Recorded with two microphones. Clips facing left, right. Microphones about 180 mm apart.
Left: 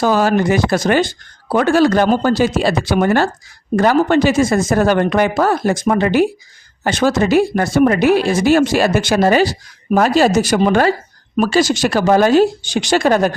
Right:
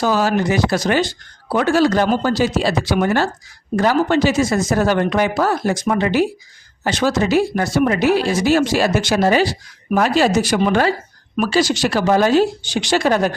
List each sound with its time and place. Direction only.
0.0 s speech: 50° left (ahead or behind)